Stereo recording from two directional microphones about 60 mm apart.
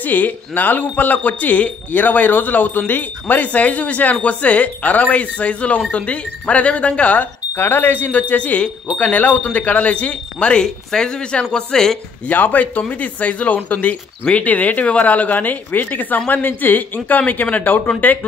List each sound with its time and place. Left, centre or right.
0.0 s speech: left
7.5 s speech: left
10.6 s speech: centre
12.3 s speech: left